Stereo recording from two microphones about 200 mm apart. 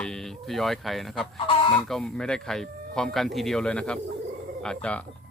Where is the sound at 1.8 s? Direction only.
5° left (ahead or behind).